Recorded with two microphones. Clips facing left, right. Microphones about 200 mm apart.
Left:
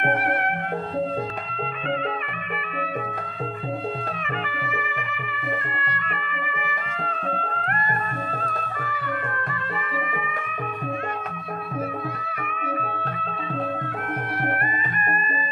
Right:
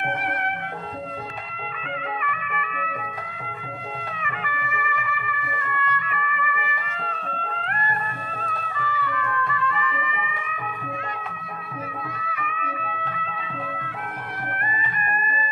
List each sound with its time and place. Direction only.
4.4 s music: 40° left (ahead or behind)
12.4 s music: 50° left (ahead or behind)